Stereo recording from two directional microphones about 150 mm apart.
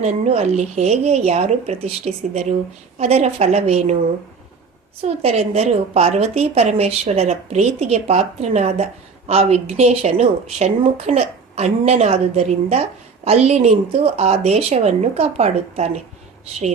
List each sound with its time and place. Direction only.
0.0 s a woman's voice: 45° right (ahead or behind)
5.0 s a woman's voice: 45° right (ahead or behind)